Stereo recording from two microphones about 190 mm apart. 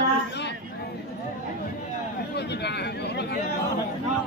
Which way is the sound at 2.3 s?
60° left (ahead or behind).